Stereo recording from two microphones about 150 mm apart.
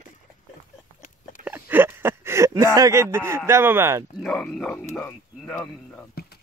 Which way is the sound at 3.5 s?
15° right (ahead or behind).